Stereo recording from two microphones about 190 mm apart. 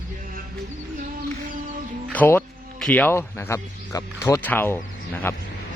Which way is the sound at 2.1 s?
10° left (ahead or behind).